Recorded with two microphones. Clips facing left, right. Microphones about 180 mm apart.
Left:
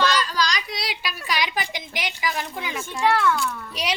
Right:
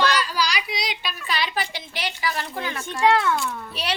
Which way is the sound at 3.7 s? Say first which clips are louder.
Left 1 dB; 15° left (ahead or behind).